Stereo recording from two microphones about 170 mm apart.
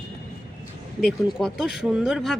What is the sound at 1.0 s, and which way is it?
Speech, centre (ahead or behind).